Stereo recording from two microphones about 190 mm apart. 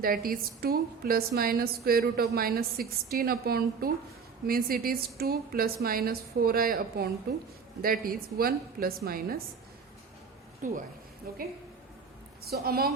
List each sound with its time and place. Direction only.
0.0 s a woman's voice: 50° right (ahead or behind)
10.6 s a woman's voice: 45° right (ahead or behind)
12.5 s a woman's voice: 55° right (ahead or behind)